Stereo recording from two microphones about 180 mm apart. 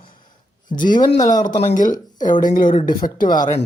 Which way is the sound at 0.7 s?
50° left (ahead or behind).